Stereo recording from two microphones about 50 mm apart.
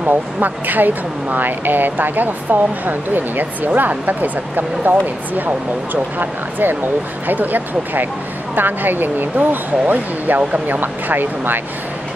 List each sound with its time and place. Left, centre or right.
0.0 s speech: right
6.1 s speech: right